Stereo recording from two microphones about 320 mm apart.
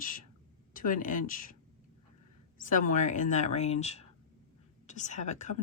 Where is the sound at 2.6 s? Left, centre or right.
Left.